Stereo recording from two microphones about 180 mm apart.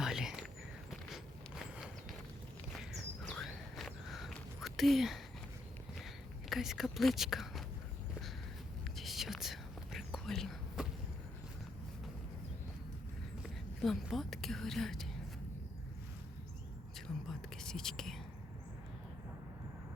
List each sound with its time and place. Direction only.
0.0 s whispering: 5° right (ahead or behind)
0.9 s walk: centre (ahead or behind)
2.7 s a sound: centre (ahead or behind)
6.5 s speech: centre (ahead or behind)
9.0 s whispering: centre (ahead or behind)
13.8 s a woman's voice: centre (ahead or behind)
17.2 s whispering: 5° left (ahead or behind)